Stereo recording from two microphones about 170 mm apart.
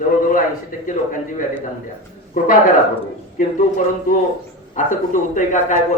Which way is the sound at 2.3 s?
55° left (ahead or behind).